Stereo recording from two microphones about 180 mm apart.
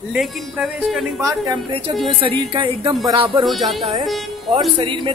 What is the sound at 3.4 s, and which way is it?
Speech, centre (ahead or behind).